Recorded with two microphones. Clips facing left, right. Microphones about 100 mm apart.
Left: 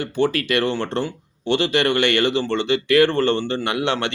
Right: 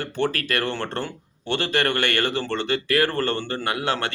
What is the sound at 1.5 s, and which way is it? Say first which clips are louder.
Speech: left 4 dB; 45° right (ahead or behind).